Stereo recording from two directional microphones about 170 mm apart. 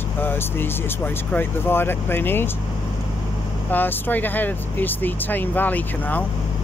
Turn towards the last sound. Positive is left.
turn(degrees=10)  # may be behind; listen again after turning